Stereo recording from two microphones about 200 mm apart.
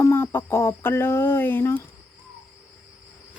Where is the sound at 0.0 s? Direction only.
10° left (ahead or behind).